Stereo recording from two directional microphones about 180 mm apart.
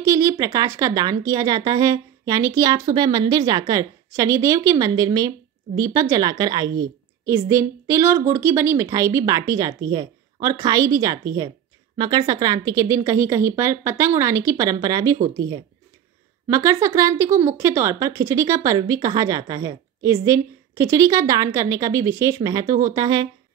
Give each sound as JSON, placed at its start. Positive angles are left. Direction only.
{"t": 0.0, "sound": "speech", "side_deg": -20}